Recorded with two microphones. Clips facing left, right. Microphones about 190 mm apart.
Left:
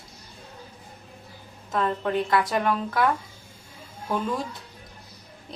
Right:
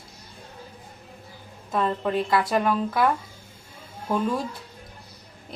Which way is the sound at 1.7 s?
20° right (ahead or behind).